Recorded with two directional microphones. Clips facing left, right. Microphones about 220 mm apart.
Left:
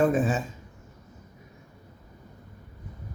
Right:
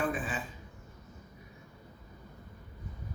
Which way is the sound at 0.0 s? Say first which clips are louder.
Left 10 dB; 45° left (ahead or behind).